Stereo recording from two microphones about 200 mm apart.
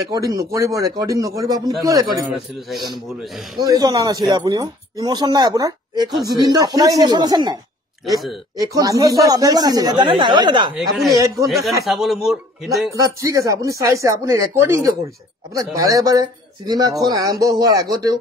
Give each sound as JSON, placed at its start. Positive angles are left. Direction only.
{"t": 0.1, "sound": "a man's voice", "side_deg": -15}
{"t": 2.2, "sound": "speech", "side_deg": 0}
{"t": 3.5, "sound": "a man's voice", "side_deg": -20}
{"t": 8.0, "sound": "speech", "side_deg": 0}
{"t": 8.5, "sound": "speech", "side_deg": -15}
{"t": 10.7, "sound": "speech", "side_deg": 0}
{"t": 11.1, "sound": "a man's voice", "side_deg": -15}
{"t": 11.4, "sound": "speech", "side_deg": 0}
{"t": 12.9, "sound": "a man's voice", "side_deg": -15}